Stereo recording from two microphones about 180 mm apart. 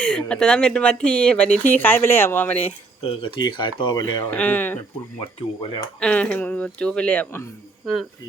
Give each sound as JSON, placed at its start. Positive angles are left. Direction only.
{"t": 0.0, "sound": "speech", "side_deg": 5}
{"t": 2.6, "sound": "speech", "side_deg": 30}
{"t": 4.3, "sound": "a woman's voice", "side_deg": 10}
{"t": 6.0, "sound": "a woman's voice", "side_deg": 5}